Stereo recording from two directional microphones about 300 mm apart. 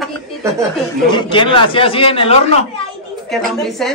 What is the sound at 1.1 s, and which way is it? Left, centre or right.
A man's voice, centre.